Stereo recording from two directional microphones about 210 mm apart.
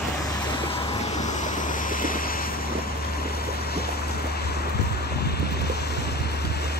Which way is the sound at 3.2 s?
45° left (ahead or behind).